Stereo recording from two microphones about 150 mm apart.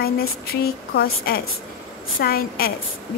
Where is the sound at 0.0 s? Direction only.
90° left.